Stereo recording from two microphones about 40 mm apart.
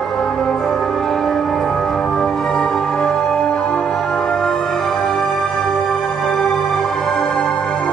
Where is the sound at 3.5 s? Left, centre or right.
Left.